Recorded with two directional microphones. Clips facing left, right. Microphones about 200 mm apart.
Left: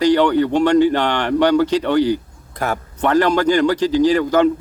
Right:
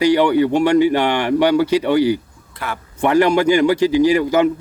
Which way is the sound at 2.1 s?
45° left (ahead or behind).